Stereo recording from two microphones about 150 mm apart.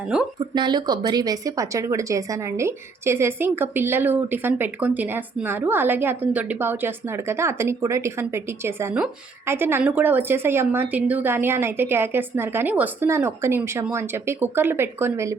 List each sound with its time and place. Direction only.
0.3 s a woman's voice: 30° right (ahead or behind)